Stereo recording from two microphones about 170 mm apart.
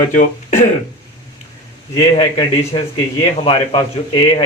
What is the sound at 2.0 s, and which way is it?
Speech, 35° left (ahead or behind).